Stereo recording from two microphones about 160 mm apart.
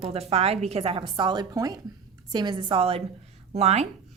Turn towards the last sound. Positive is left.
turn(degrees=-40)  # may be behind; listen again after turning